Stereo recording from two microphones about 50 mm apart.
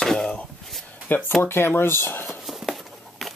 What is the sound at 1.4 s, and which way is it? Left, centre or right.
Speech, left.